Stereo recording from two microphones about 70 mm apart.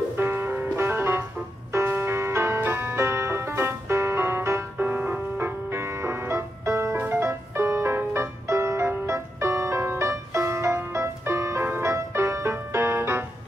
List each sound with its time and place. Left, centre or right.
0.2 s music: right
4.7 s music: right
5.7 s music: right